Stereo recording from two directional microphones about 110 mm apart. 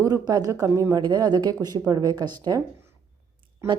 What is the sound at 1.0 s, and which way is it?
Speech, 40° right (ahead or behind).